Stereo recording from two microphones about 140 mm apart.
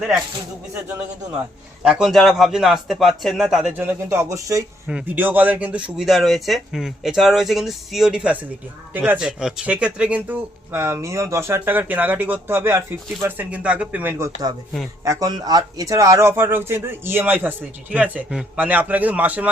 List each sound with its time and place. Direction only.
1.8 s speech: 5° right (ahead or behind)
3.8 s speech: 20° right (ahead or behind)
4.9 s speech: 10° right (ahead or behind)